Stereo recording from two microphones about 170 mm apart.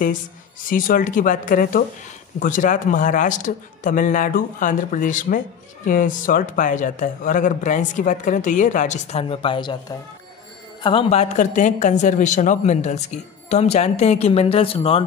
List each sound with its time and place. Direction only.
0.7 s a man's voice: 55° left (ahead or behind); by 15.0 s 35° left (ahead or behind)